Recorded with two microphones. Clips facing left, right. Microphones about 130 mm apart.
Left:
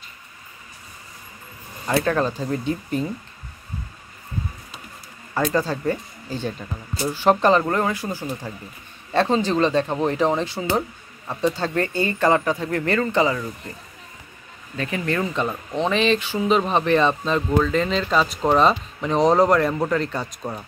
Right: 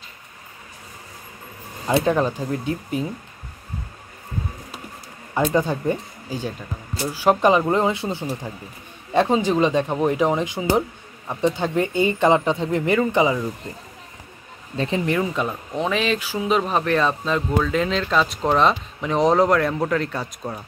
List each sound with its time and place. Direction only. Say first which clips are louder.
1.9 s speech: right 2 dB; 20° right (ahead or behind)
2.5 s speech: left 1 dB; 5° right (ahead or behind)
5.3 s speech: right 2 dB; 15° right (ahead or behind)
14.8 s speech: right 3 dB; 25° right (ahead or behind)
15.1 s speech: right 1 dB; 10° right (ahead or behind)